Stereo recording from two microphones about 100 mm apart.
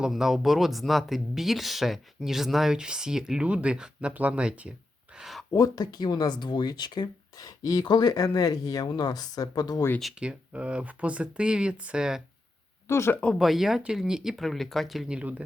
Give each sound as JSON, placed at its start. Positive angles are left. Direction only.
{"t": 0.0, "sound": "speech", "side_deg": -5}
{"t": 5.5, "sound": "speech", "side_deg": 40}
{"t": 10.0, "sound": "speech", "side_deg": -5}
{"t": 12.9, "sound": "speech", "side_deg": 25}
{"t": 13.1, "sound": "speech", "side_deg": 5}